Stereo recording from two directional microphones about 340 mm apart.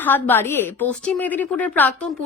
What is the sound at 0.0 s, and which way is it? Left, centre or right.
A woman's voice, centre.